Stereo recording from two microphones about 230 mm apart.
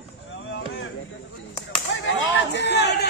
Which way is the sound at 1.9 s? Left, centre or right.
Left.